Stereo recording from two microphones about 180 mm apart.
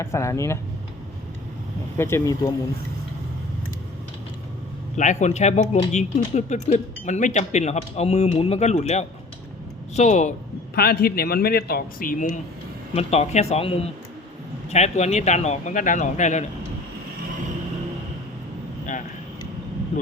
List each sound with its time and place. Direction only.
0.0 s speech: 15° left (ahead or behind)
2.0 s speech: 15° left (ahead or behind)
4.9 s speech: 40° left (ahead or behind)
10.8 s speech: 60° left (ahead or behind)
12.9 s speech: 35° left (ahead or behind)